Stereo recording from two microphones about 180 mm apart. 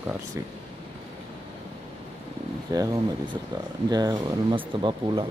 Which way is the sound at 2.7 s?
20° right (ahead or behind).